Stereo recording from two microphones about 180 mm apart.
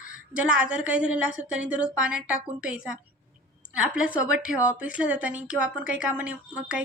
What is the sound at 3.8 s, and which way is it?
A woman's voice, 5° right (ahead or behind).